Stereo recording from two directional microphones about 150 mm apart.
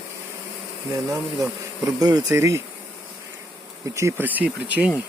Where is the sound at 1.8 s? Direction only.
25° right (ahead or behind).